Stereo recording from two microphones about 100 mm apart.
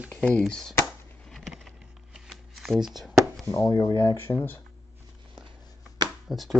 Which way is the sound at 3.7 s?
40° left (ahead or behind).